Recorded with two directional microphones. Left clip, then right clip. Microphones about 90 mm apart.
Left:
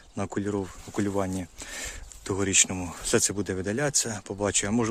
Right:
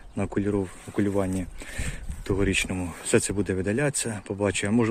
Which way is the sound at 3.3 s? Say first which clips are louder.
Right 3 dB; 10° left (ahead or behind).